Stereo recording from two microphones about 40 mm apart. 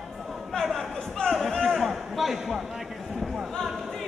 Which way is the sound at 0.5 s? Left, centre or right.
Centre.